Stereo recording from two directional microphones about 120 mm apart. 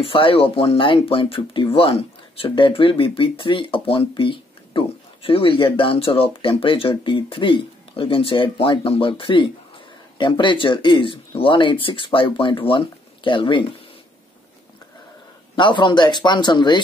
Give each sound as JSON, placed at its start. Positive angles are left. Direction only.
{"t": 0.0, "sound": "speech", "side_deg": 50}
{"t": 15.5, "sound": "speech", "side_deg": 40}